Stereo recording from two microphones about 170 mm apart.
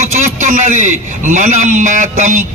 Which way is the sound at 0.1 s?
45° right (ahead or behind).